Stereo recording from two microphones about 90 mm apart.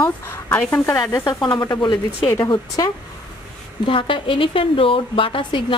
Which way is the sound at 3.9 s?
75° left (ahead or behind).